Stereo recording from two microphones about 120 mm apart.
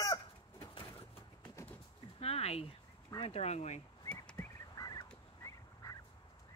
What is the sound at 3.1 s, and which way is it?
Speech, 55° left (ahead or behind).